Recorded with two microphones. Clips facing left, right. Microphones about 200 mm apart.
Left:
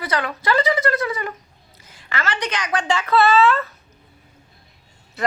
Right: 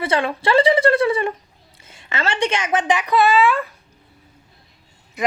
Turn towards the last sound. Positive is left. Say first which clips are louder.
# right 2 dB
turn(degrees=-15)  # may be behind; listen again after turning